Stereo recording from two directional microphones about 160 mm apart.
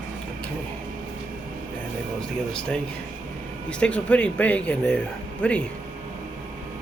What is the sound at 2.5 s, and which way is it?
Speech, 5° left (ahead or behind).